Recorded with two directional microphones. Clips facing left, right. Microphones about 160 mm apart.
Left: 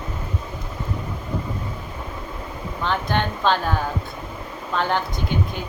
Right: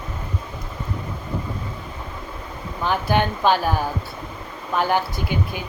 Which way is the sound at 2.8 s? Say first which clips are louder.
Right 3 dB; 10° right (ahead or behind).